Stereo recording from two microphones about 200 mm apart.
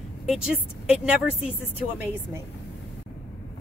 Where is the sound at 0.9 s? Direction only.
5° right (ahead or behind).